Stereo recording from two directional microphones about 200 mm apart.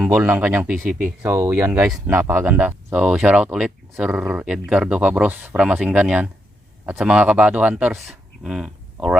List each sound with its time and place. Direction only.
0.0 s speech: 10° right (ahead or behind)